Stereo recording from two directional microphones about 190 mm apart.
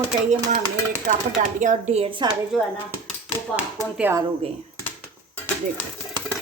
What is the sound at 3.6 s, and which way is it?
Speech, 10° right (ahead or behind).